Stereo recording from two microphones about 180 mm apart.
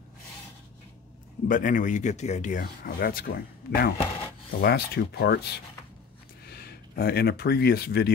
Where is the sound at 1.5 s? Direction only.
45° left (ahead or behind).